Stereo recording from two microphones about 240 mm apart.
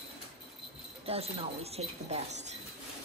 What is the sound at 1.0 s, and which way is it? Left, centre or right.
Speech, right.